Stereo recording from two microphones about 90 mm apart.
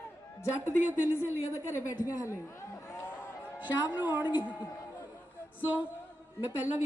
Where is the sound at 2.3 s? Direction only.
30° left (ahead or behind).